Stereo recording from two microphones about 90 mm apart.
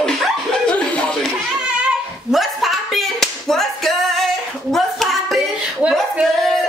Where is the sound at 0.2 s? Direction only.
10° left (ahead or behind).